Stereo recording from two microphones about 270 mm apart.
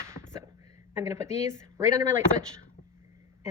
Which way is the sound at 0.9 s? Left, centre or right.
Centre.